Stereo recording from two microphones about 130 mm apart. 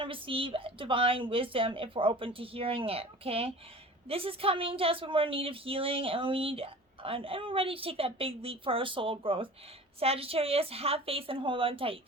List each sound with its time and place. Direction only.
0.0 s a woman's voice: 45° right (ahead or behind)